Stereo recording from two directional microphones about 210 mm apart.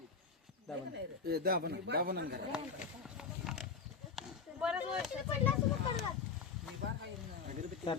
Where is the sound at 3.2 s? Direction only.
Centre (ahead or behind).